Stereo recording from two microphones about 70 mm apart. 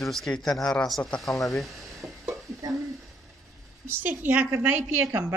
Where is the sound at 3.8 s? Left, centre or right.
Right.